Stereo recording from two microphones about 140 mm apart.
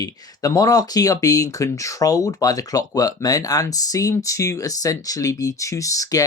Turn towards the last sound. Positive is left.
turn(degrees=25)  # may be behind; listen again after turning